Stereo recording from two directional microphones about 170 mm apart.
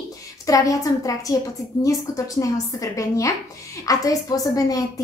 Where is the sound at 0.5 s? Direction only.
20° left (ahead or behind).